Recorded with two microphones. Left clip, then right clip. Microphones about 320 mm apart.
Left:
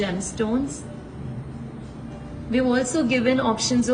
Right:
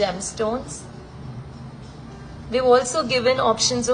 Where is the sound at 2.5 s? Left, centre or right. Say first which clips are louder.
Right 5 dB; centre.